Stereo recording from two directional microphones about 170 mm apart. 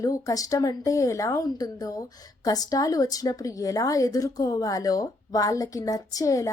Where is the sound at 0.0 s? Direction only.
20° left (ahead or behind).